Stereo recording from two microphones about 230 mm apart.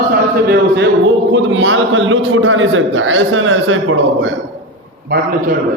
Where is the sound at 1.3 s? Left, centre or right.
Right.